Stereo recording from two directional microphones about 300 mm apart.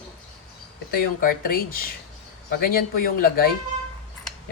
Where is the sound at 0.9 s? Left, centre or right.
Left.